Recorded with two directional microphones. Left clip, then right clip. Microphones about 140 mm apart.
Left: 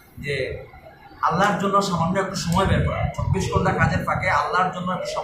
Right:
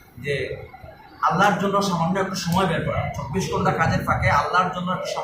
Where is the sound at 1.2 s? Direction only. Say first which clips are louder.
Right 1 dB; 20° left (ahead or behind).